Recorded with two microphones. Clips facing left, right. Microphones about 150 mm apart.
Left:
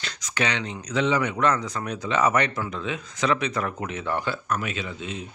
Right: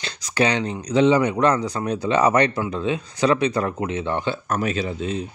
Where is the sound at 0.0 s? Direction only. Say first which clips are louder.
Right 6 dB; 30° right (ahead or behind).